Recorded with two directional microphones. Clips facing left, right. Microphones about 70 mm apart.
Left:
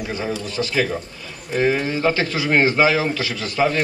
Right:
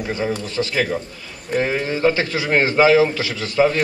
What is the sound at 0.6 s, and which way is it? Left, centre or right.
A man's voice, right.